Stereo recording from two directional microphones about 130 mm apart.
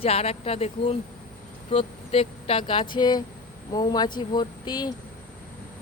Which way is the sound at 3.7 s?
30° left (ahead or behind).